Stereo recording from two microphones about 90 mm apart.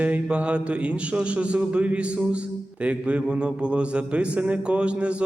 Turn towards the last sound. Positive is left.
turn(degrees=-10)  # may be behind; listen again after turning